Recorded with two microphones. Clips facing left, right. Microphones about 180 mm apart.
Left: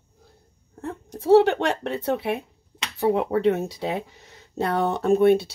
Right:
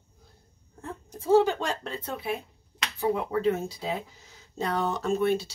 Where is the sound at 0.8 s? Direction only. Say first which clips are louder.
Left 6 dB; 70° left (ahead or behind).